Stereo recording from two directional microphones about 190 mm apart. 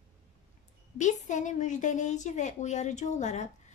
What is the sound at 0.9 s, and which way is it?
A woman's voice, 40° left (ahead or behind).